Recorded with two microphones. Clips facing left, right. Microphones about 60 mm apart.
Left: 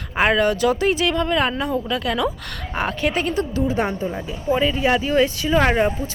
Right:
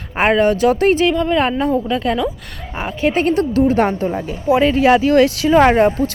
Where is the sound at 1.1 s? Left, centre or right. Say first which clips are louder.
Right 4 dB; centre.